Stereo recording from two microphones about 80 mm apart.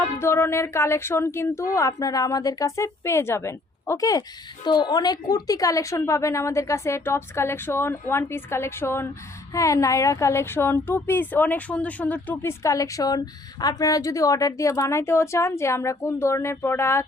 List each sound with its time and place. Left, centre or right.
0.2 s a woman's voice: left
4.6 s a woman's voice: left; by 12.2 s centre
12.4 s a woman's voice: left